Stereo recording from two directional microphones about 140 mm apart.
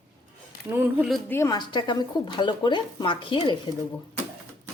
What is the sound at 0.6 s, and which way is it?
Speech, 15° right (ahead or behind).